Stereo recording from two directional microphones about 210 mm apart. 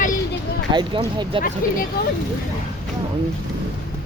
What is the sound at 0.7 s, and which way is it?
Speech, 20° right (ahead or behind).